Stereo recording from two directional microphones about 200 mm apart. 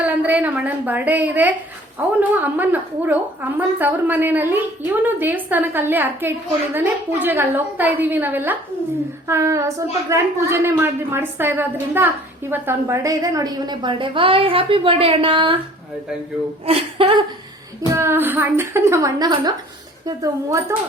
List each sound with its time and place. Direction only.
0.0 s a woman's voice: 10° right (ahead or behind); by 15.6 s 25° right (ahead or behind)
16.6 s a woman's voice: 25° right (ahead or behind)
17.9 s a woman's voice: 10° right (ahead or behind)